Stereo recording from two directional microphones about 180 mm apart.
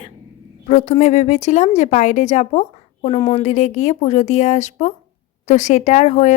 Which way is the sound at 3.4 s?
40° left (ahead or behind).